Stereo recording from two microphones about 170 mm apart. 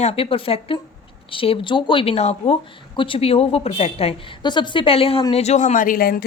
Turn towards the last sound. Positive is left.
turn(degrees=60)  # may be behind; listen again after turning